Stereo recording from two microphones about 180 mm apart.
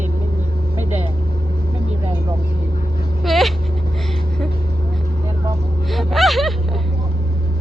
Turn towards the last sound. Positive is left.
turn(degrees=0)  # may be behind; listen again after turning